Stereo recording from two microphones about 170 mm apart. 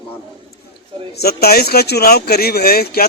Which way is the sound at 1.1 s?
65° left (ahead or behind).